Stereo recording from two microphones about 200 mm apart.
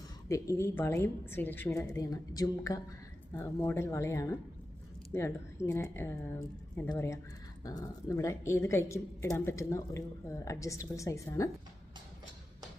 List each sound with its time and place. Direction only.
0.3 s speech: 15° left (ahead or behind)